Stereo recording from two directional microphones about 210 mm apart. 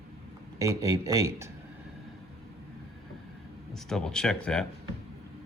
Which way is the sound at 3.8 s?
5° left (ahead or behind).